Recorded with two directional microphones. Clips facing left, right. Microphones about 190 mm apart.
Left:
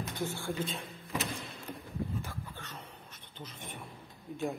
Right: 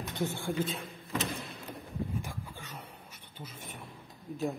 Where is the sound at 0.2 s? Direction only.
15° right (ahead or behind).